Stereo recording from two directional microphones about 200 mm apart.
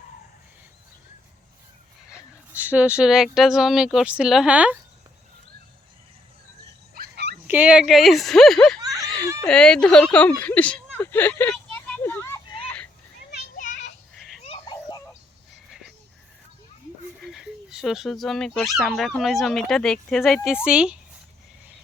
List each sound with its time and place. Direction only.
2.1 s a sound: 10° right (ahead or behind)
3.3 s speech: centre (ahead or behind)
6.7 s dog: 50° right (ahead or behind)
7.4 s speech: 10° right (ahead or behind)
9.4 s a sound: 5° left (ahead or behind)
13.3 s children playing: 40° left (ahead or behind)
14.2 s a sound: centre (ahead or behind)
14.4 s children playing: 25° left (ahead or behind)
17.2 s speech: centre (ahead or behind)